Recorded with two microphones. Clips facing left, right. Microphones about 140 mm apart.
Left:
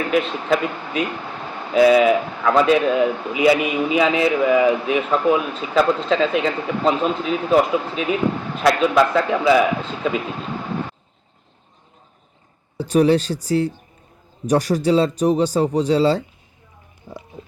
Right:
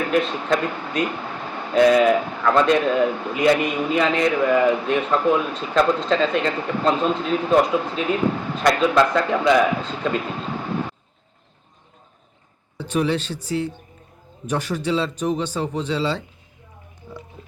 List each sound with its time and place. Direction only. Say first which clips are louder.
0.1 s speech: left 2 dB; centre (ahead or behind)
12.7 s speech: left 6 dB; 35° left (ahead or behind)